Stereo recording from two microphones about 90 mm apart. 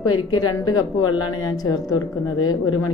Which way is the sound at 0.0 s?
50° left (ahead or behind).